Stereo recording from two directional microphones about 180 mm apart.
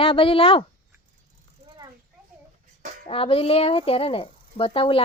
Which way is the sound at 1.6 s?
25° right (ahead or behind).